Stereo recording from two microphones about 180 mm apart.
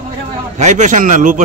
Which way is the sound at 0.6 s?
40° right (ahead or behind).